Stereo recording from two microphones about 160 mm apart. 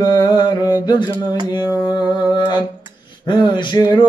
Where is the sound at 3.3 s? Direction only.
30° left (ahead or behind).